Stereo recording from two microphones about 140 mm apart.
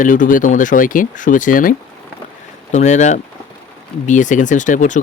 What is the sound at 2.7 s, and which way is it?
Speech, 60° left (ahead or behind).